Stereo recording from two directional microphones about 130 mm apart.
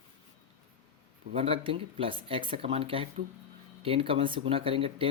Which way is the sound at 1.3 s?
45° right (ahead or behind).